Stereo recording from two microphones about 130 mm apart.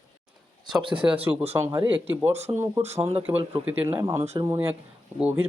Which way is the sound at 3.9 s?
20° right (ahead or behind).